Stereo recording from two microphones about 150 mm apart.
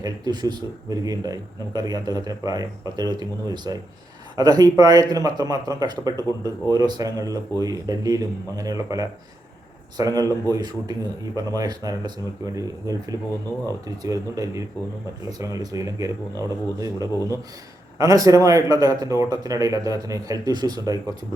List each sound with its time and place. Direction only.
0.0 s speech: 25° right (ahead or behind)